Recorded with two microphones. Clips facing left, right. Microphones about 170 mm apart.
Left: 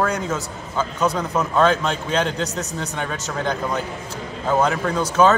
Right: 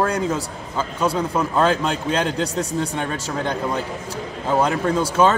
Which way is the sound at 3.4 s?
10° right (ahead or behind).